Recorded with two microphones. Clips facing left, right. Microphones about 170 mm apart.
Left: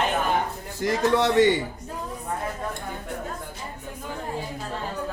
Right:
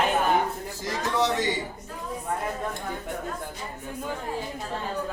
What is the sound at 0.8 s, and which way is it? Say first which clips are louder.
Speech: left 5 dB; 65° left (ahead or behind).